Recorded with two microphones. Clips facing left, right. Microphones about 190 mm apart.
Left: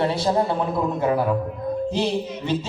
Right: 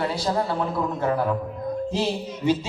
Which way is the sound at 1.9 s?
Centre (ahead or behind).